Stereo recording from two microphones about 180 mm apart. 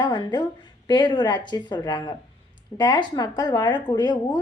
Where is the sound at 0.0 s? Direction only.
25° left (ahead or behind).